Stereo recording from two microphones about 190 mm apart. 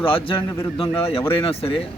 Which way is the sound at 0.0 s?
25° left (ahead or behind).